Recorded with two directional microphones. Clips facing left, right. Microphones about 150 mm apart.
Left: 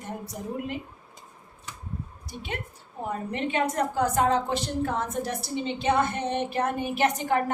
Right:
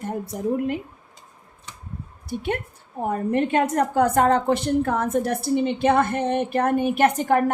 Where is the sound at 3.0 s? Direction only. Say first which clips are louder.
Right 8 dB; 50° right (ahead or behind).